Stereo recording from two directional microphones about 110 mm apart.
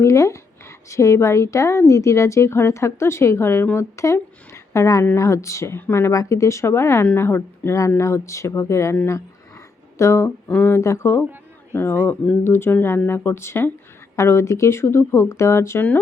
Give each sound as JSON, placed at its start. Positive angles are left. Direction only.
{"t": 0.0, "sound": "a woman's voice", "side_deg": 25}
{"t": 10.0, "sound": "a woman's voice", "side_deg": 25}